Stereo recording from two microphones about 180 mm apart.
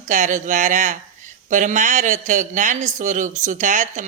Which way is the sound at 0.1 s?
45° right (ahead or behind).